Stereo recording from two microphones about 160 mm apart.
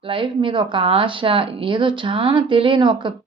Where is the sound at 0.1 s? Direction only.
30° right (ahead or behind).